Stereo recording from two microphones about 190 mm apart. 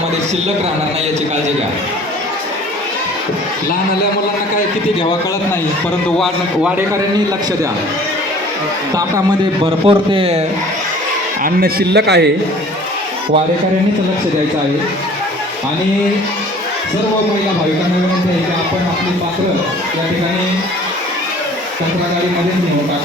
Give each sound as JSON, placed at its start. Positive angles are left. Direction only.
{"t": 9.8, "sound": "speech", "side_deg": -25}
{"t": 11.4, "sound": "a man's voice", "side_deg": -55}